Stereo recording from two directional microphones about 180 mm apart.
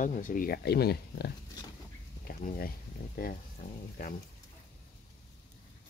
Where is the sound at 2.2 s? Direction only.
50° left (ahead or behind).